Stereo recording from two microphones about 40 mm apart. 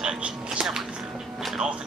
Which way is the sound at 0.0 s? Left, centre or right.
Right.